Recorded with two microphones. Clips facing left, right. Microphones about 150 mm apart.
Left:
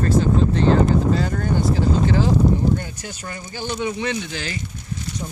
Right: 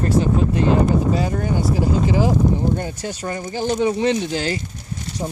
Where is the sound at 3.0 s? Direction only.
35° right (ahead or behind).